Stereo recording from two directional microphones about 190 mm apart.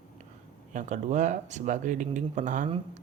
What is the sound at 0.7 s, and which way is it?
Speech, 40° right (ahead or behind).